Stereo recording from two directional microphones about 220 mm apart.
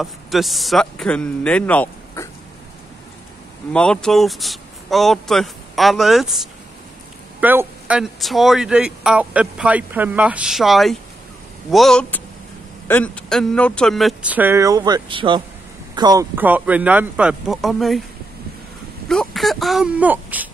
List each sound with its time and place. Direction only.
0.0 s speech: centre (ahead or behind)
3.7 s speech: 5° left (ahead or behind)
19.0 s speech: centre (ahead or behind)